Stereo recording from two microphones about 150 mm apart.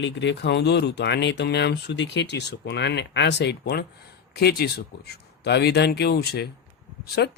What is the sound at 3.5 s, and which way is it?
Speech, 90° left.